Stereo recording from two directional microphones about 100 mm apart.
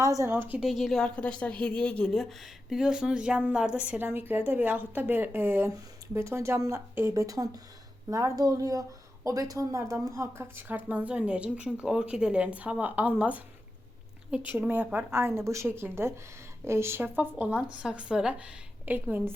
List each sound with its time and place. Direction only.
0.0 s speech: 30° right (ahead or behind)
0.6 s a woman's voice: centre (ahead or behind)
1.0 s a woman's voice: 10° left (ahead or behind); by 19.3 s 20° right (ahead or behind)